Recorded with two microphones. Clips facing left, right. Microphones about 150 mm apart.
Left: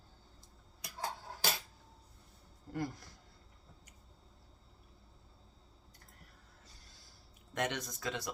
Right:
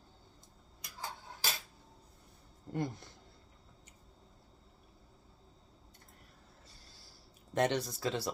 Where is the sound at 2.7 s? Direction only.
25° right (ahead or behind).